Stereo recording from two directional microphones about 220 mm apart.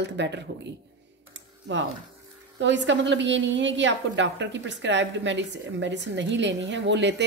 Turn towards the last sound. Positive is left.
turn(degrees=-50)  # may be behind; listen again after turning